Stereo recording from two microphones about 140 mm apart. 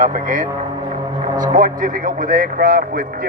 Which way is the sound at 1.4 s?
70° right (ahead or behind).